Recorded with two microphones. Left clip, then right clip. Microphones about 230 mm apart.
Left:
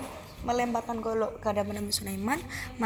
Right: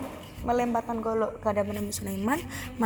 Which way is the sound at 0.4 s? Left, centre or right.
Left.